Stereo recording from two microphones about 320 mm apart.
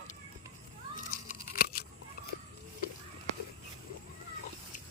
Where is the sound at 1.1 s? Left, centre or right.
Left.